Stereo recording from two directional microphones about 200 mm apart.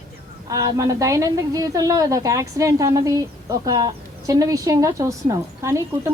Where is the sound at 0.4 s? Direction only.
15° right (ahead or behind).